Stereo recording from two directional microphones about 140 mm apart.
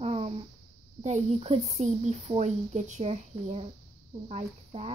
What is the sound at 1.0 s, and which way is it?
A woman's voice, 50° right (ahead or behind).